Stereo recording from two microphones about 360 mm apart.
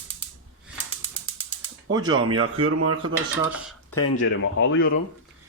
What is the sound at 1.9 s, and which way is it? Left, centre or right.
Speech, centre.